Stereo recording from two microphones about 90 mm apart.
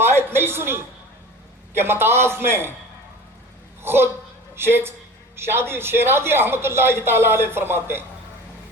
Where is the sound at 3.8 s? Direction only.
25° right (ahead or behind).